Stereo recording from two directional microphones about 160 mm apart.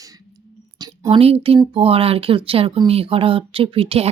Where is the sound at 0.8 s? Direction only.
25° right (ahead or behind).